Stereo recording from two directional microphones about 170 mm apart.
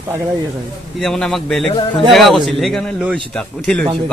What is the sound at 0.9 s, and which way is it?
Speech, 5° left (ahead or behind).